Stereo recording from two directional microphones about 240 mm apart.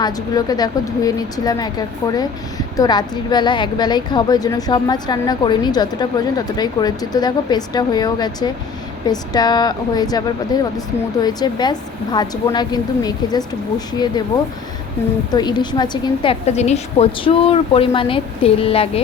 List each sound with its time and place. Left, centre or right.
0.0 s a woman's voice: centre
15.3 s a woman's voice: centre